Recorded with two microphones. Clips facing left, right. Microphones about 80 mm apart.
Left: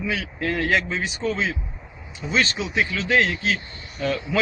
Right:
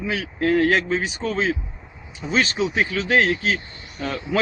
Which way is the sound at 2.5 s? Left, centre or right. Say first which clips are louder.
Right 3 dB; right.